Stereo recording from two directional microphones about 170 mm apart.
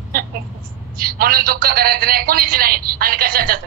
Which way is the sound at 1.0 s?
60° right (ahead or behind).